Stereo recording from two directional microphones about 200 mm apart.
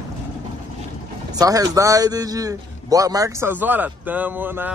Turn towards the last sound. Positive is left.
turn(degrees=-10)  # may be behind; listen again after turning